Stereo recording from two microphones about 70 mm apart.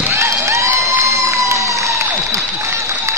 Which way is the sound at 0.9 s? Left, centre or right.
Right.